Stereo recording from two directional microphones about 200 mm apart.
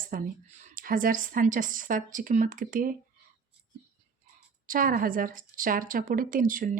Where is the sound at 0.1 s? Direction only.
40° right (ahead or behind).